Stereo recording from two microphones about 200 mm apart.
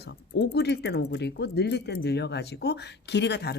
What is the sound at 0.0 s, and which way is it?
Speech, 55° left (ahead or behind).